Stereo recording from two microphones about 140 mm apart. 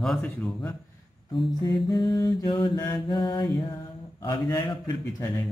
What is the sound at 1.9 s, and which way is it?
Mantra, 30° left (ahead or behind).